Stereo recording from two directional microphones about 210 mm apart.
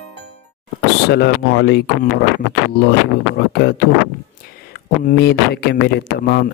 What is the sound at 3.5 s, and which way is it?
A man's voice, 50° left (ahead or behind).